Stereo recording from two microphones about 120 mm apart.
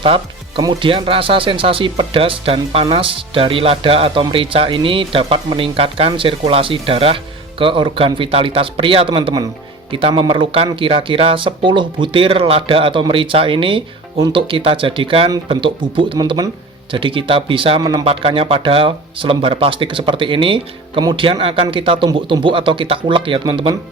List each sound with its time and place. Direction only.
0.0 s music: 45° right (ahead or behind)
0.6 s speech: 40° right (ahead or behind)